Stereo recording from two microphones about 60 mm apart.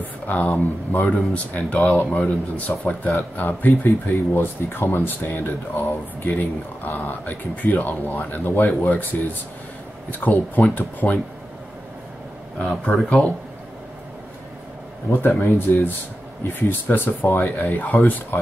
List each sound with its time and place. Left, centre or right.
0.3 s speech: left
10.2 s speech: left
12.5 s speech: centre
15.2 s speech: left
16.4 s speech: left